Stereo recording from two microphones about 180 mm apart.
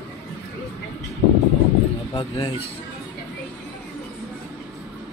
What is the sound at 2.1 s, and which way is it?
Speech, 30° left (ahead or behind).